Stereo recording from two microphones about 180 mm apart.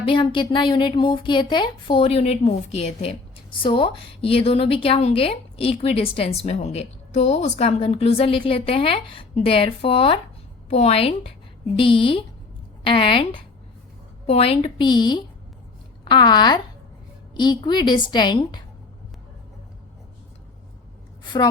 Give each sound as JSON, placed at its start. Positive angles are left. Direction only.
{"t": 0.0, "sound": "a woman's voice", "side_deg": 30}